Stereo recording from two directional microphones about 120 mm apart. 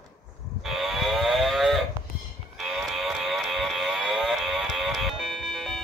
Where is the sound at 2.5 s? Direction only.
Centre (ahead or behind).